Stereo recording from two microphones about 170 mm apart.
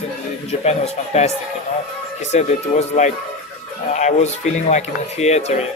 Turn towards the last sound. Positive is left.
turn(degrees=40)  # may be behind; listen again after turning